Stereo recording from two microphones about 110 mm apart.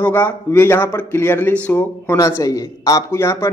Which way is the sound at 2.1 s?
30° left (ahead or behind).